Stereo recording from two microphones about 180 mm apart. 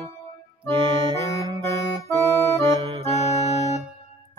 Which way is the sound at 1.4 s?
20° right (ahead or behind).